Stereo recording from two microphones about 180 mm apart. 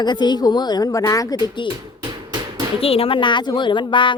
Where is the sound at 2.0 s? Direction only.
25° right (ahead or behind).